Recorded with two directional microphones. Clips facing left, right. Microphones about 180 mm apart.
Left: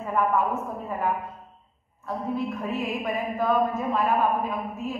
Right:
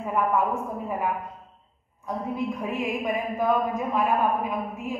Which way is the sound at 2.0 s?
15° right (ahead or behind).